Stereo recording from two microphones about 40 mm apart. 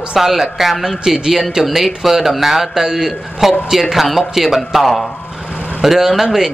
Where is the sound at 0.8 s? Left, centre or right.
Centre.